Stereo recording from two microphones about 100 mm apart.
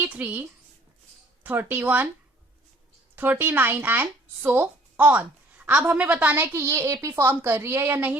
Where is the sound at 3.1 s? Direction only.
20° right (ahead or behind).